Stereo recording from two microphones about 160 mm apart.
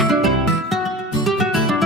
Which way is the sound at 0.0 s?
Centre (ahead or behind).